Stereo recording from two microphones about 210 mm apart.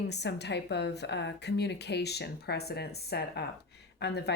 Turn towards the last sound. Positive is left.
turn(degrees=50)  # may be behind; listen again after turning